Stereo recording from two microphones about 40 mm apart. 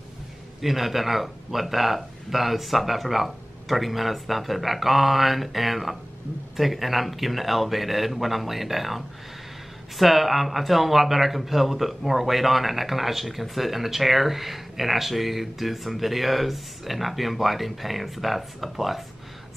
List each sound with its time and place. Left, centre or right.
0.6 s speech: centre